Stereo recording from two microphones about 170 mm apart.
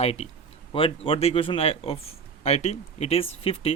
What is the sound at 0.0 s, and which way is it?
Speech, 35° left (ahead or behind).